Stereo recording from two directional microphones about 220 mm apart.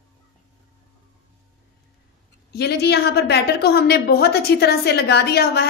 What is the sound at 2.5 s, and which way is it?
A woman's voice, 50° left (ahead or behind).